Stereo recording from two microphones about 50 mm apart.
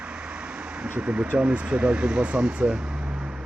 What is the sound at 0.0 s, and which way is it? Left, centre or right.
Vehicle, right.